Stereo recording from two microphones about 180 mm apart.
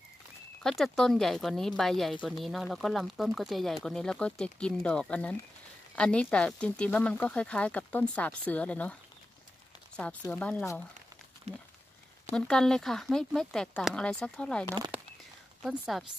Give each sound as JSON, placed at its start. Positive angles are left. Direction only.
{"t": 0.6, "sound": "speech", "side_deg": 0}
{"t": 10.3, "sound": "speech", "side_deg": 10}
{"t": 11.5, "sound": "speech", "side_deg": -35}
{"t": 12.3, "sound": "speech", "side_deg": 5}